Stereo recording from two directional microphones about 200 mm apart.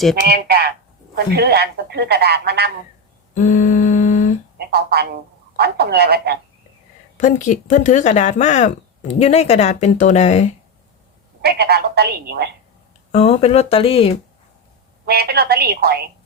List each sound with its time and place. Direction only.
0.3 s speech: 50° right (ahead or behind)
3.3 s humming: 40° left (ahead or behind)
4.5 s speech: 50° right (ahead or behind)
7.2 s speech: 40° left (ahead or behind)
11.4 s speech: 50° right (ahead or behind)
13.1 s speech: 30° left (ahead or behind)
15.0 s speech: 55° right (ahead or behind)